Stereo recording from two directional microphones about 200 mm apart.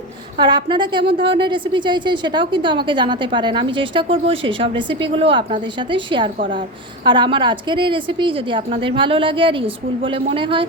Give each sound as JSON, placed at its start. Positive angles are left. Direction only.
{"t": 0.3, "sound": "a woman's voice", "side_deg": -25}